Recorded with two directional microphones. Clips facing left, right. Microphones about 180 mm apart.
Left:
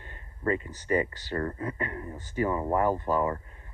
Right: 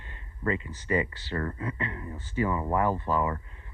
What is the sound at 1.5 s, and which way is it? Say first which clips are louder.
Speech: left 1 dB; 35° left (ahead or behind).